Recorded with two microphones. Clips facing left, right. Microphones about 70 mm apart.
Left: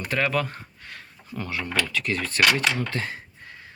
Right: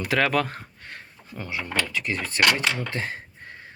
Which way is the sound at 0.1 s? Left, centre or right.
Right.